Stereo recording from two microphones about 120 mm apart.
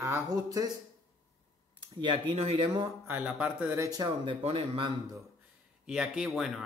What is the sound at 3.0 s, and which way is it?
Speech, 15° right (ahead or behind).